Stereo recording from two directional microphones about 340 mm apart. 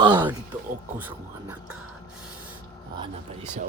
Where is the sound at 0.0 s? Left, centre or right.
Centre.